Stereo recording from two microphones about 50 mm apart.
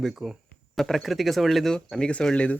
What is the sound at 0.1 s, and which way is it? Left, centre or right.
Speech, centre.